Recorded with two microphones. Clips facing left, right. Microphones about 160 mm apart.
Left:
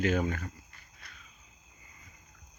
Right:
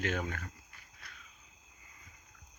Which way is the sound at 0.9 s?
Centre (ahead or behind).